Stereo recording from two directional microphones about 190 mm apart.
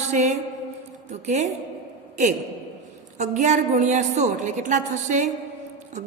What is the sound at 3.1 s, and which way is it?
A woman's voice, 40° right (ahead or behind).